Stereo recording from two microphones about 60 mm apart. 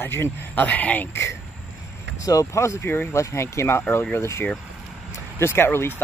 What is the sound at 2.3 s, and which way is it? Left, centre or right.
Speech, left.